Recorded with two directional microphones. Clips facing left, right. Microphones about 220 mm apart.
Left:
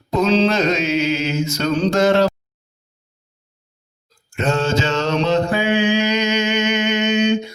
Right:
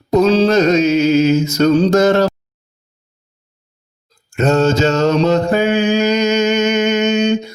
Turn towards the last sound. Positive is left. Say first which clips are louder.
# right 3 dB
turn(degrees=-45)  # may be behind; listen again after turning